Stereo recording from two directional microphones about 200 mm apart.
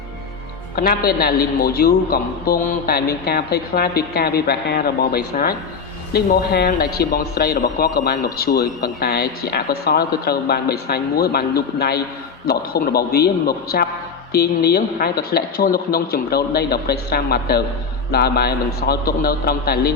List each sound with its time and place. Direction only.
0.8 s a man's voice: 50° left (ahead or behind)